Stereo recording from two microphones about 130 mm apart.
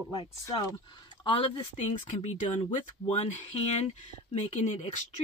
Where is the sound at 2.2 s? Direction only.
60° left (ahead or behind).